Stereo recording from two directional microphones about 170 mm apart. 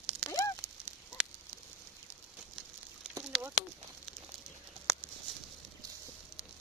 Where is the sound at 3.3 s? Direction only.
Centre (ahead or behind).